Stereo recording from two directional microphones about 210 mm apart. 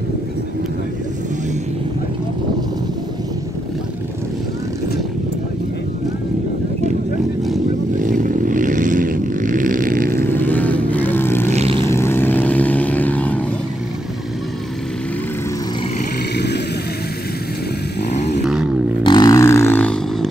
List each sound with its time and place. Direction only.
8.0 s vehicle: 40° right (ahead or behind)
10.2 s vehicle: 10° left (ahead or behind)
11.5 s vehicle: 30° right (ahead or behind)
11.8 s vehicle: 10° left (ahead or behind)
16.3 s vehicle: 55° left (ahead or behind)
19.0 s a sound: 20° left (ahead or behind)